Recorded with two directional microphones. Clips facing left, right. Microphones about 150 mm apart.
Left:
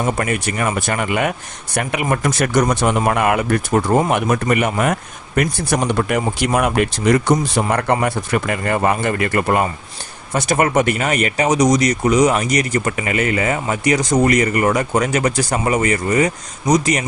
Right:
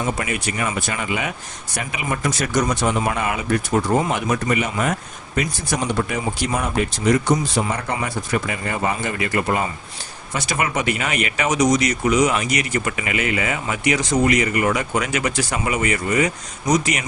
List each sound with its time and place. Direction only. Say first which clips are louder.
0.0 s speech: left 4 dB; 55° left (ahead or behind); by 17.1 s 35° left (ahead or behind)